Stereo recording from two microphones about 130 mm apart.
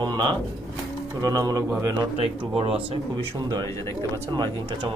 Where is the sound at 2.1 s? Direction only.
45° right (ahead or behind).